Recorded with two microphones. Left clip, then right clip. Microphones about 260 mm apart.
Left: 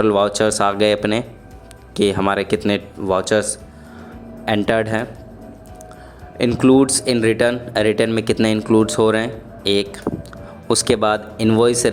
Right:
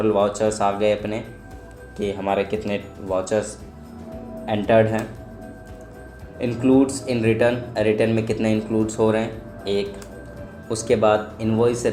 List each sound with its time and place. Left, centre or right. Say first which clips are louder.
0.0 s speech: left 4 dB; left
6.4 s speech: left 5 dB; left